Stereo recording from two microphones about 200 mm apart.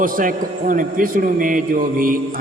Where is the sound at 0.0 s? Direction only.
45° right (ahead or behind).